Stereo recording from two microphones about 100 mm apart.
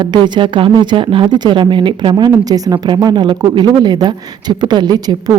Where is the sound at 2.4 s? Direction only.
40° right (ahead or behind).